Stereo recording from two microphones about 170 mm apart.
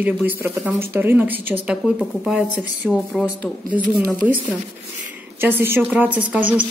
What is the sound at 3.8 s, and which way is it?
Speech, 55° right (ahead or behind).